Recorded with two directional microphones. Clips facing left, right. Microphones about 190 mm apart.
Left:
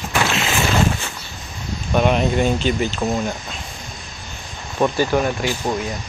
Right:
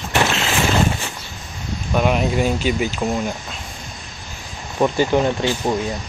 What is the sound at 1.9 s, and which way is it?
Speech, 5° right (ahead or behind).